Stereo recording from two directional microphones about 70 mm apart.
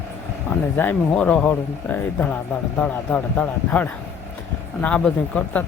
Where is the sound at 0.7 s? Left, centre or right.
Left.